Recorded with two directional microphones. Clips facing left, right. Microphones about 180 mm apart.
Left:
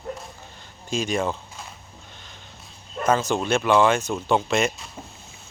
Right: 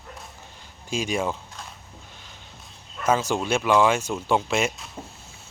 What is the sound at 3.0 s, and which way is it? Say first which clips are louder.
Speech: left 1 dB; 10° right (ahead or behind).